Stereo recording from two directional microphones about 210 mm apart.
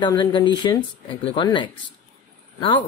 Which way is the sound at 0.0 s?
20° left (ahead or behind).